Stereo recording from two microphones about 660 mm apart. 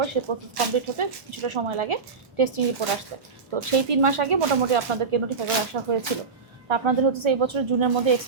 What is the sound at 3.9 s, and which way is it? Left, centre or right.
A woman's voice, right.